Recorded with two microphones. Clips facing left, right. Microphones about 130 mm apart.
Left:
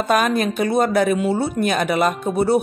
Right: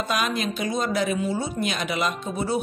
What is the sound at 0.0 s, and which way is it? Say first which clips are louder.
Speech: left 8 dB; 50° left (ahead or behind).